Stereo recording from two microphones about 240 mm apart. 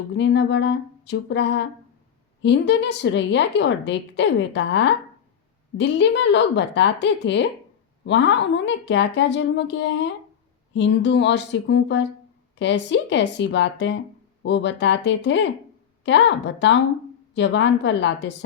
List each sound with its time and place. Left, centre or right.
0.2 s a woman's voice: left